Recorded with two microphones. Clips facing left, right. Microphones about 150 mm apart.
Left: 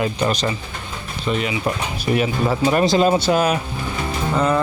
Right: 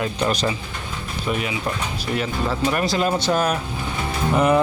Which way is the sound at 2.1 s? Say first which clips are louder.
Left 4 dB; 15° left (ahead or behind).